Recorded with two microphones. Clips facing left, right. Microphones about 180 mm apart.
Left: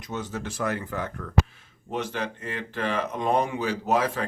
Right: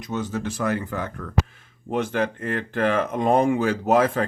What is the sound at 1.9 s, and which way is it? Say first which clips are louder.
Speech: right 6 dB; 50° right (ahead or behind).